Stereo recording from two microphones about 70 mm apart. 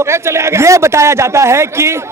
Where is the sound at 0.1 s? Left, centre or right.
Right.